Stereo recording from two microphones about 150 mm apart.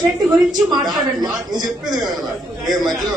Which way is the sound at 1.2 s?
25° right (ahead or behind).